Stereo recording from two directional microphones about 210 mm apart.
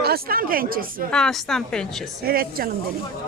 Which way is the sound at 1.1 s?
5° left (ahead or behind).